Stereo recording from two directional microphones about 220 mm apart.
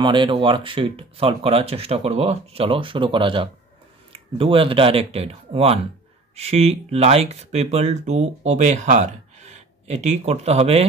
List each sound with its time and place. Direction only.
0.0 s speech: 20° right (ahead or behind)